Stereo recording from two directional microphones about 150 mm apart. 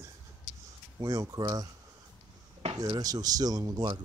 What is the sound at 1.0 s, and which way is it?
Speech, 25° right (ahead or behind).